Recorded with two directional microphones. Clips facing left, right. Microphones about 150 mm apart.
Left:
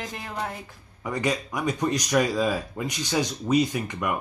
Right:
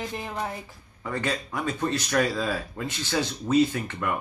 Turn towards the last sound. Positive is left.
turn(degrees=15)  # may be behind; listen again after turning